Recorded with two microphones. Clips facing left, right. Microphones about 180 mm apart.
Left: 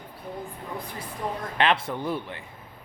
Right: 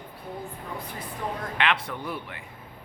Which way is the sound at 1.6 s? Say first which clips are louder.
Left 4 dB; 30° left (ahead or behind).